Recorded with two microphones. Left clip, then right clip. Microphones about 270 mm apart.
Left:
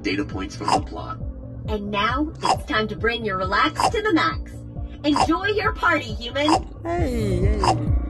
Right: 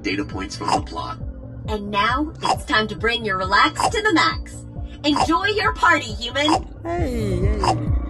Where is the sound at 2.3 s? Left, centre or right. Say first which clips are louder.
Even; centre.